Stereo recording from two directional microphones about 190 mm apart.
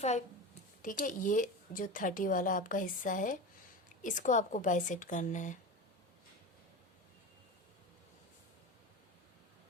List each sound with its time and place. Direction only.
0.8 s a woman's voice: 45° left (ahead or behind)